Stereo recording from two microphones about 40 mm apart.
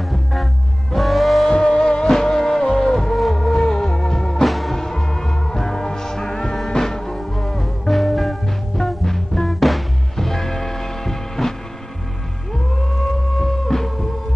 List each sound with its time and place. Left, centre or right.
0.1 s music: centre
1.5 s music: centre
4.5 s music: centre
4.7 s music: centre
13.4 s music: centre